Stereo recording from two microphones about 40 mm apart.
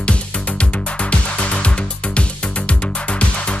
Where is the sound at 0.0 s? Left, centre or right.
Left.